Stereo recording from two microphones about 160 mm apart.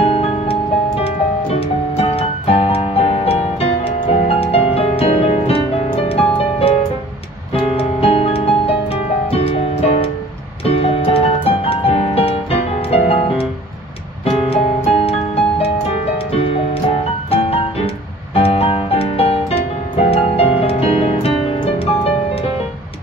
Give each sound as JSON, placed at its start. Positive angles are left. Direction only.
{"t": 0.0, "sound": "music", "side_deg": 40}
{"t": 7.7, "sound": "music", "side_deg": 35}
{"t": 14.9, "sound": "music", "side_deg": 40}
{"t": 17.3, "sound": "music", "side_deg": 35}